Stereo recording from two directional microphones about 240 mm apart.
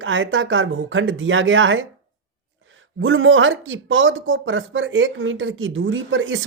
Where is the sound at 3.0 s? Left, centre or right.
Right.